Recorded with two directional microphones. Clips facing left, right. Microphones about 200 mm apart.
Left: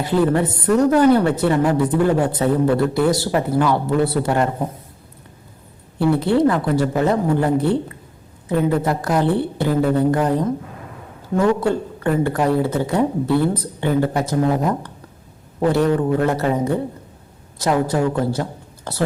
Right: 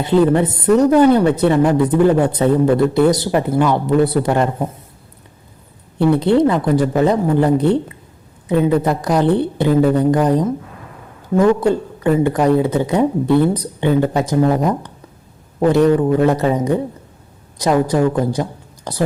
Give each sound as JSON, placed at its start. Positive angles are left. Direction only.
{"t": 0.0, "sound": "a woman's voice", "side_deg": -20}
{"t": 6.0, "sound": "a woman's voice", "side_deg": -20}